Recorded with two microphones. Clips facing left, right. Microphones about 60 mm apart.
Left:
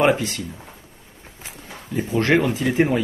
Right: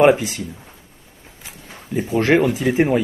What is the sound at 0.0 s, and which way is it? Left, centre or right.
Speech, centre.